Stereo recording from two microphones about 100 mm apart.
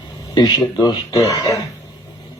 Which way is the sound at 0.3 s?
45° left (ahead or behind).